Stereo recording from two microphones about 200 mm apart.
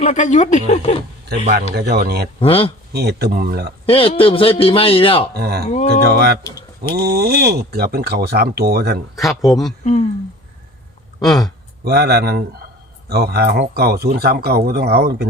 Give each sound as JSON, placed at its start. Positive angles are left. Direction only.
{"t": 0.0, "sound": "speech", "side_deg": 35}
{"t": 1.7, "sound": "speech", "side_deg": -55}
{"t": 2.4, "sound": "a man's voice", "side_deg": 30}
{"t": 2.9, "sound": "speech", "side_deg": -50}
{"t": 3.8, "sound": "a man's voice", "side_deg": 25}
{"t": 5.3, "sound": "speech", "side_deg": -50}
{"t": 5.6, "sound": "speech", "side_deg": 35}
{"t": 5.9, "sound": "speech", "side_deg": -50}
{"t": 9.1, "sound": "speech", "side_deg": 0}
{"t": 9.8, "sound": "speech", "side_deg": 35}
{"t": 11.2, "sound": "speech", "side_deg": 0}
{"t": 11.9, "sound": "speech", "side_deg": -55}